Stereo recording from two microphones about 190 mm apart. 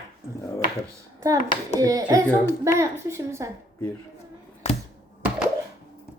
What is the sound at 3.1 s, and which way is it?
Female singing, 15° right (ahead or behind).